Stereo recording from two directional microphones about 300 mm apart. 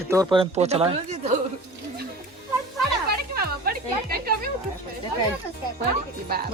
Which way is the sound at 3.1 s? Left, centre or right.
Right.